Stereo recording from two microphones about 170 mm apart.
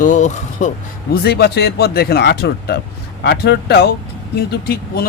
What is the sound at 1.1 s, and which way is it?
A man's voice, 70° left (ahead or behind).